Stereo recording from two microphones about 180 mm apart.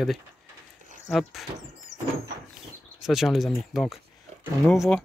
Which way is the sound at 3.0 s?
Centre (ahead or behind).